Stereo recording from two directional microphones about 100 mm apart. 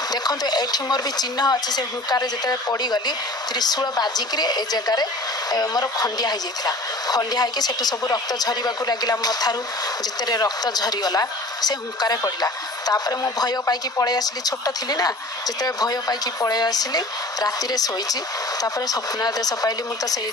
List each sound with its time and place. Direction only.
0.1 s a woman's voice: 40° left (ahead or behind)